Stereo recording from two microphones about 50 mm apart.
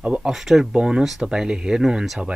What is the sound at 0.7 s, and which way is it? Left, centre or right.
Speech, centre.